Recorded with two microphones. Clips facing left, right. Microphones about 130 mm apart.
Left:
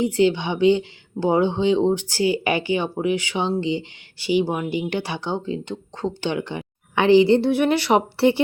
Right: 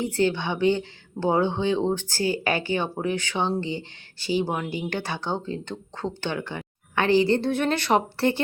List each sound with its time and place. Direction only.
0.0 s speech: 15° left (ahead or behind)